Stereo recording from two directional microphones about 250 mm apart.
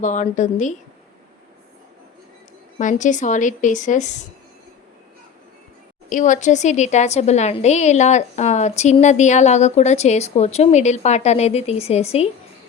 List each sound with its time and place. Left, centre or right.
0.0 s a woman's voice: left
2.7 s a woman's voice: left
6.1 s a woman's voice: left